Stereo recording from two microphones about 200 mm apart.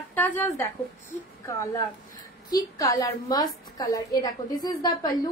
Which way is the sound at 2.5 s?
15° left (ahead or behind).